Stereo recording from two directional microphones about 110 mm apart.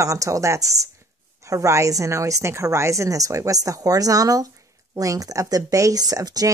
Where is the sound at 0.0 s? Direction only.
30° right (ahead or behind).